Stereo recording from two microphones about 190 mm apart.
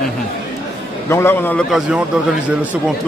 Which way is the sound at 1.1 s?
15° left (ahead or behind).